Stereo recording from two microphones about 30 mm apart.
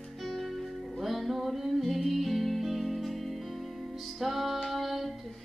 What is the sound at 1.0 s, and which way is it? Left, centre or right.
Music, centre.